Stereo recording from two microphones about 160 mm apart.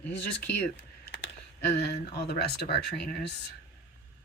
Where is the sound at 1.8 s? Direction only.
90° left.